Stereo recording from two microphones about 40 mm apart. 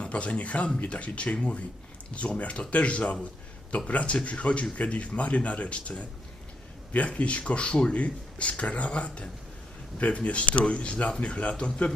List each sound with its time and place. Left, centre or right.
0.0 s speech: left